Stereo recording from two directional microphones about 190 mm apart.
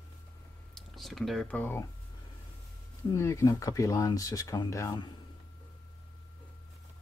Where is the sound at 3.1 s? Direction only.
15° left (ahead or behind).